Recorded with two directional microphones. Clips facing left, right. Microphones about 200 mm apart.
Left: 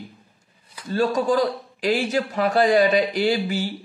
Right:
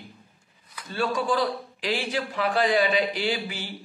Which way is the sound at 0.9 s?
40° left (ahead or behind).